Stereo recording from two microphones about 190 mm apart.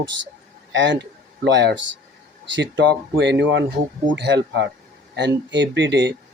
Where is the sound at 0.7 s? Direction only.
70° right (ahead or behind).